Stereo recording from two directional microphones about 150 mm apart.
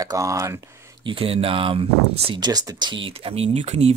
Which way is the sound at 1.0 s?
40° right (ahead or behind).